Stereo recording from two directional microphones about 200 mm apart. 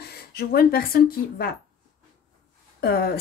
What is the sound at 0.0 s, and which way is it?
Speech, 50° left (ahead or behind).